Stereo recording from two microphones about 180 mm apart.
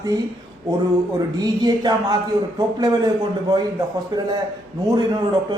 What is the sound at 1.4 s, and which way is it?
A man's voice, 20° right (ahead or behind).